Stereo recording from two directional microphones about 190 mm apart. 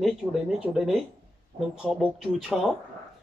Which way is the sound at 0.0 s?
Centre (ahead or behind).